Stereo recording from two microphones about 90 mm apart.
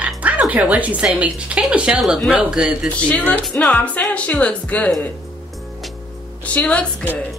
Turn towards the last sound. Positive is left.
turn(degrees=15)  # may be behind; listen again after turning